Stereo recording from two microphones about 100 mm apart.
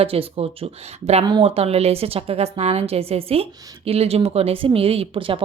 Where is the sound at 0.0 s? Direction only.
70° right (ahead or behind).